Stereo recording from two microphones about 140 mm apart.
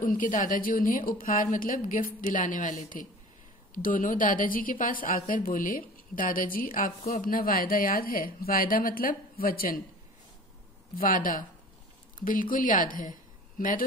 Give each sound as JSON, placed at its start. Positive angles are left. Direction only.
{"t": 0.0, "sound": "a woman's voice", "side_deg": 75}
{"t": 11.0, "sound": "a woman's voice", "side_deg": 80}